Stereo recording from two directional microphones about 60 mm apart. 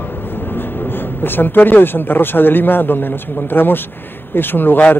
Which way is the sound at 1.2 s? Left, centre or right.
Left.